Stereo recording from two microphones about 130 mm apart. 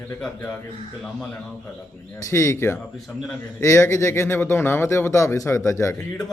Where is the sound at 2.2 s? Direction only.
25° left (ahead or behind).